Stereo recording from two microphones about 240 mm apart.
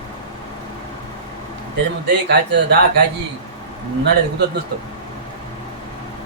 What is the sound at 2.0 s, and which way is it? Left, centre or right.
Speech, right.